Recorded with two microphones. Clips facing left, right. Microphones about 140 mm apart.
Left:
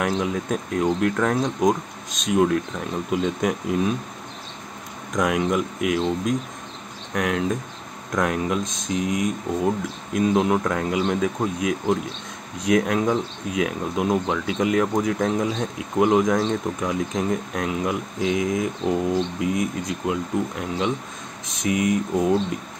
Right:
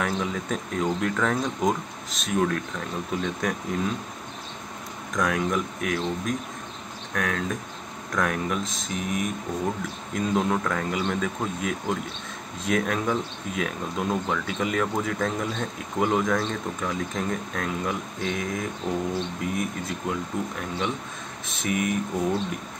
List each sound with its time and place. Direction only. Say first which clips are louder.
0.0 s speech: left 4 dB; 10° left (ahead or behind)
5.1 s speech: left 4 dB; 20° left (ahead or behind)
21.5 s speech: left 5 dB; 15° left (ahead or behind)